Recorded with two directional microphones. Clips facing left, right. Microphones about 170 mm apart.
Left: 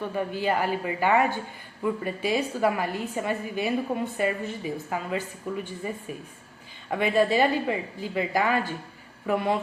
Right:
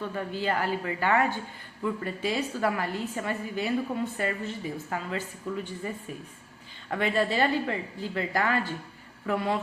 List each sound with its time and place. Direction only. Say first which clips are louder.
0.0 s a woman's voice: left 3 dB; 15° left (ahead or behind)
6.9 s a woman's voice: left 4 dB; 15° left (ahead or behind)